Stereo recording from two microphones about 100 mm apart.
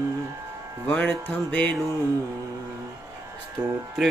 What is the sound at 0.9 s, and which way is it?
Music, 15° left (ahead or behind).